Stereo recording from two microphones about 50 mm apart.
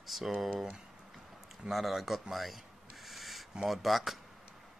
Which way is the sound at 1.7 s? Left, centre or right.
Centre.